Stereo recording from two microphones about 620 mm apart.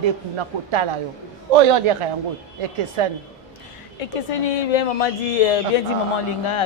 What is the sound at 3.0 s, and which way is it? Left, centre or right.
Speech, right.